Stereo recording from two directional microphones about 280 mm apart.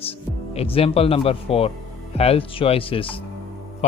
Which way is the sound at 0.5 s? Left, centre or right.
Left.